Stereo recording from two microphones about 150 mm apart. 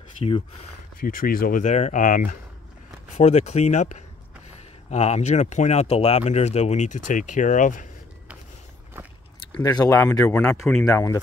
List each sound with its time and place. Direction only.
1.0 s speech: 70° left (ahead or behind)
3.2 s speech: 45° left (ahead or behind)
9.6 s speech: 25° left (ahead or behind)
10.0 s speech: 5° left (ahead or behind)
10.9 s speech: 20° left (ahead or behind)